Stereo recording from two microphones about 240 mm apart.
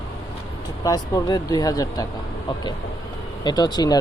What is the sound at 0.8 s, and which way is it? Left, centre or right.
Speech, centre.